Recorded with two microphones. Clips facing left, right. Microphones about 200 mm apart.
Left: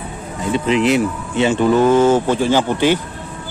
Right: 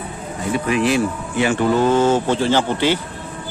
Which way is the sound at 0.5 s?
20° left (ahead or behind).